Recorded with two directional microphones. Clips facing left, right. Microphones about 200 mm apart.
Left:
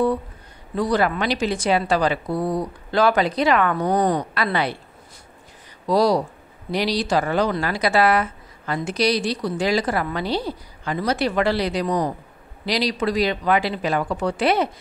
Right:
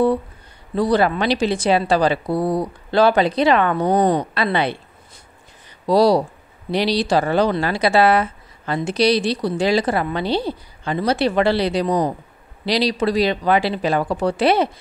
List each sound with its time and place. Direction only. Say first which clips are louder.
0.7 s speech: right 3 dB; 30° right (ahead or behind)
5.9 s speech: right 4 dB; 30° right (ahead or behind)